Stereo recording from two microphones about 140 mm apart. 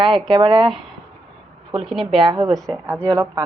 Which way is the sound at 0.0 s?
35° right (ahead or behind).